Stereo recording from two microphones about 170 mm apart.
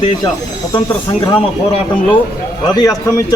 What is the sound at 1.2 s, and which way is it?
A man's voice, 25° left (ahead or behind).